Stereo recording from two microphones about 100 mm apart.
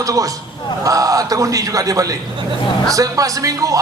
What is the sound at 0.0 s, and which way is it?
A man's voice, 35° right (ahead or behind).